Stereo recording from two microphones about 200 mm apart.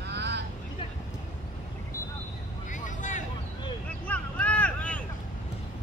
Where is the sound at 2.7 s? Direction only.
40° left (ahead or behind).